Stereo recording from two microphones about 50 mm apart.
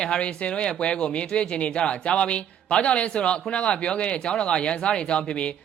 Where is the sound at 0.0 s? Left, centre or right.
Centre.